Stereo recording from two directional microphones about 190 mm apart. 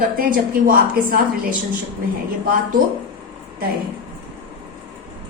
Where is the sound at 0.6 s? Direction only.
45° right (ahead or behind).